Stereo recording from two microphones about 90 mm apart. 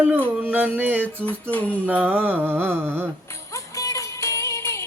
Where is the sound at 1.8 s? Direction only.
20° right (ahead or behind).